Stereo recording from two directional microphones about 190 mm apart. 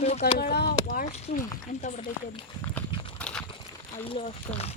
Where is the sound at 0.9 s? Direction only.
35° left (ahead or behind).